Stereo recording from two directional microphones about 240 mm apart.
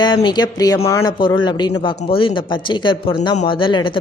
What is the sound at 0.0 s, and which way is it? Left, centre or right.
Speech, centre.